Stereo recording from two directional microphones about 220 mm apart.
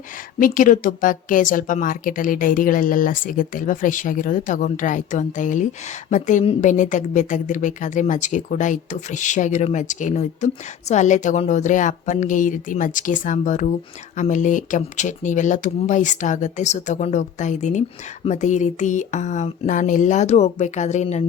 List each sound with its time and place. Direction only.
0.3 s a woman's voice: 40° left (ahead or behind)